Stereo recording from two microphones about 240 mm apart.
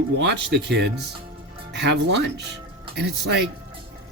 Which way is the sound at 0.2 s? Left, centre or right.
Right.